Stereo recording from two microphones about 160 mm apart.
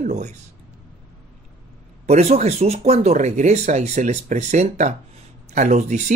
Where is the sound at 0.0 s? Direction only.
45° right (ahead or behind).